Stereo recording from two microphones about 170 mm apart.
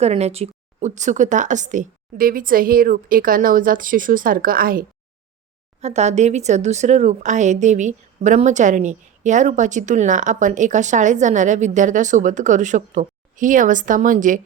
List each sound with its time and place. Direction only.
0.0 s speech: 40° right (ahead or behind); by 4.9 s 60° right (ahead or behind)
5.8 s speech: 40° right (ahead or behind)